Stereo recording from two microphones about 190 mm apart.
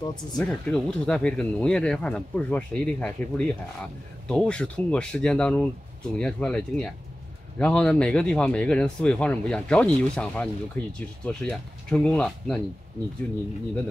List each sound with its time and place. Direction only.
0.0 s speech: 20° left (ahead or behind)
0.4 s speech: 5° left (ahead or behind)